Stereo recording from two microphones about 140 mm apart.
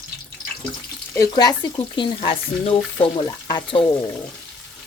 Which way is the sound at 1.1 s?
25° left (ahead or behind).